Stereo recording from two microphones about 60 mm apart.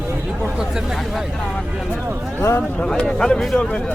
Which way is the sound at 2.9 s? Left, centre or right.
Centre.